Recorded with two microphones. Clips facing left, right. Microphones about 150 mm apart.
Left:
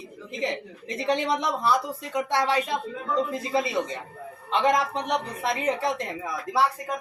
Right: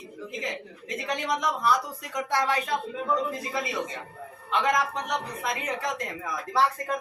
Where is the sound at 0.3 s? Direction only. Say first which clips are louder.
Left 6 dB; 30° left (ahead or behind).